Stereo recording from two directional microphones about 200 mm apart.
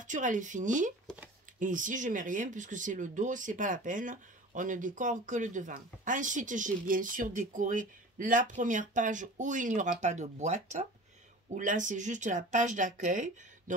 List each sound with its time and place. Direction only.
0.0 s speech: 40° right (ahead or behind)